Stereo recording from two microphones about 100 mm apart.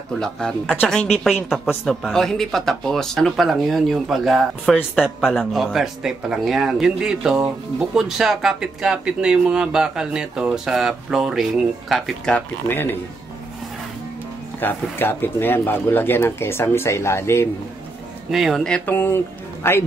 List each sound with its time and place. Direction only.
0.1 s speech: 5° left (ahead or behind)
12.6 s speech: 20° left (ahead or behind)
14.6 s speech: 20° left (ahead or behind)
18.3 s speech: centre (ahead or behind)
18.9 s speech: 20° left (ahead or behind)